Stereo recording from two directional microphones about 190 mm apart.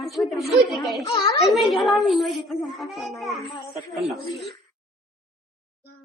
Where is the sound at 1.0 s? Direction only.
25° left (ahead or behind).